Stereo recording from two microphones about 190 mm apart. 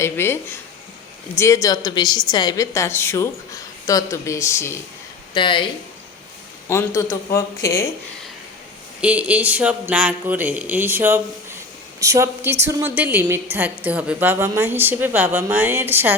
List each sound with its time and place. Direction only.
0.0 s a woman's voice: 10° left (ahead or behind)
5.3 s speech: 25° left (ahead or behind)
6.7 s a woman's voice: 15° left (ahead or behind)
9.0 s speech: 5° right (ahead or behind)